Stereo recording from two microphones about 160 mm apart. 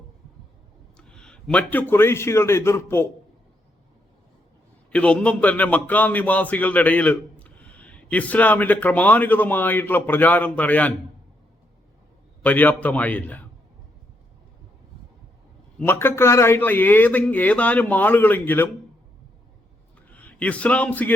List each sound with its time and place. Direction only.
0.9 s a man's voice: 5° left (ahead or behind)
4.9 s speech: 5° left (ahead or behind)
12.4 s speech: 10° left (ahead or behind)
15.9 s speech: 15° left (ahead or behind)
20.1 s a man's voice: 10° left (ahead or behind)